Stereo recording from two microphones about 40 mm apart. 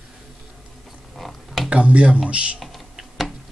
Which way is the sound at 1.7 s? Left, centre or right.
Right.